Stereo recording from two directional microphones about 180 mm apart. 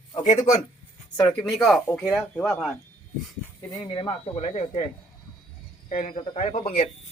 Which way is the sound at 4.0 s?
30° left (ahead or behind).